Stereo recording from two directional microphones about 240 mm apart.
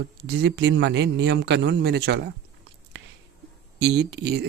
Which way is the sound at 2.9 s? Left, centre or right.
Right.